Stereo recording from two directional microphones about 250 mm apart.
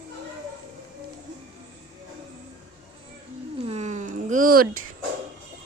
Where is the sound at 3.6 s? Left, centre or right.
Right.